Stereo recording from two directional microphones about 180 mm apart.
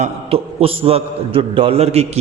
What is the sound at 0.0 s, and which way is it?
A man's voice, 30° right (ahead or behind).